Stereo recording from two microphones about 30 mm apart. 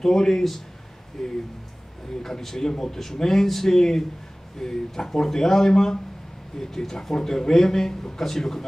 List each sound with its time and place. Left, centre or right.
0.0 s speech: centre